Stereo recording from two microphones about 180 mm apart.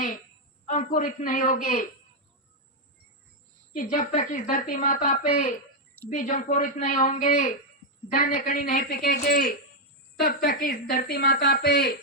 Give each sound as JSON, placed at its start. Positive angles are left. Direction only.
{"t": 0.6, "sound": "a woman's voice", "side_deg": 45}
{"t": 3.7, "sound": "a woman's voice", "side_deg": 45}